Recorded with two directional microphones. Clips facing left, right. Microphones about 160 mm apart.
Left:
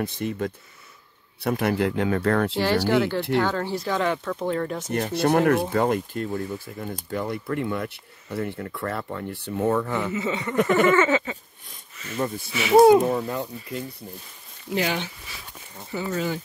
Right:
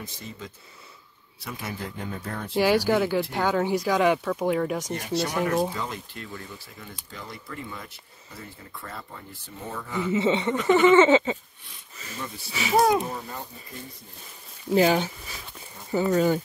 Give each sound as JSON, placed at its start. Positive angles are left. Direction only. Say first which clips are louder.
{"t": 0.0, "sound": "speech", "louder": "left 12 dB", "side_deg": 65}
{"t": 2.5, "sound": "speech", "louder": "even", "side_deg": -10}
{"t": 4.9, "sound": "speech", "louder": "left 11 dB", "side_deg": 55}
{"t": 10.1, "sound": "speech", "louder": "right 4 dB", "side_deg": -25}
{"t": 10.5, "sound": "speech", "louder": "left 1 dB", "side_deg": 55}
{"t": 11.0, "sound": "speech", "louder": "right 4 dB", "side_deg": -25}
{"t": 13.0, "sound": "speech", "louder": "left 9 dB", "side_deg": 75}
{"t": 14.7, "sound": "speech", "louder": "right 6 dB", "side_deg": -35}